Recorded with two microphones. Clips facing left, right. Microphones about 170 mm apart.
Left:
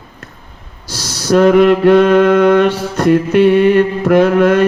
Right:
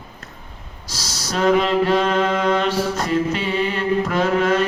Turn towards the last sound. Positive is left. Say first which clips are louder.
# left 9 dB
turn(degrees=65)  # may be behind; listen again after turning